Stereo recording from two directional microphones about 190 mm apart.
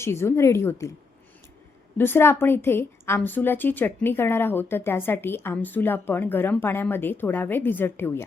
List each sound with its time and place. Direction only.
0.0 s a woman's voice: 15° left (ahead or behind)
2.0 s a woman's voice: 10° left (ahead or behind)